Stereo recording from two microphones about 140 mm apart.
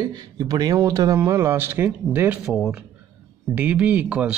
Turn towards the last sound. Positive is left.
turn(degrees=-10)  # may be behind; listen again after turning